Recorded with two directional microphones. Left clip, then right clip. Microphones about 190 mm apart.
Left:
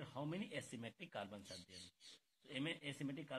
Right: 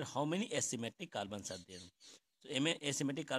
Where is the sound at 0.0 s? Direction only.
70° right (ahead or behind); by 1.6 s 45° right (ahead or behind).